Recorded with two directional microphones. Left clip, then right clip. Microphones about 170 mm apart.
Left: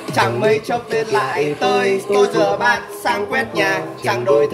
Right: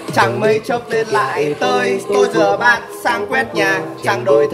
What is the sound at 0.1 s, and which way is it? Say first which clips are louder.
Music: right 2 dB; 20° right (ahead or behind).